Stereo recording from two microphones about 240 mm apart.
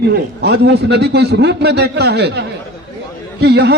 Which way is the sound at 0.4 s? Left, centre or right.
Right.